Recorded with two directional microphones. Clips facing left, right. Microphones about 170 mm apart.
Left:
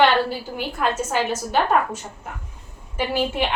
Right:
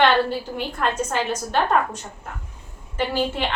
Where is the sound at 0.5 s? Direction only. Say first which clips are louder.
Left 2 dB; 5° left (ahead or behind).